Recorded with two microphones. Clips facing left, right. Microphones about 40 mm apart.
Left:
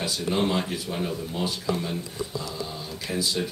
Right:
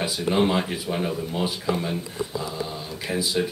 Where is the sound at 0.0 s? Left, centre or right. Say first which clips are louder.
Right 3 dB; centre.